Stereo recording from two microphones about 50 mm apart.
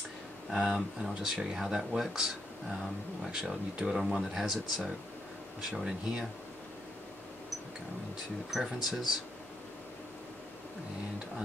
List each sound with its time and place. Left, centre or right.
0.5 s speech: centre
0.7 s speech: centre
3.3 s speech: centre
8.5 s speech: centre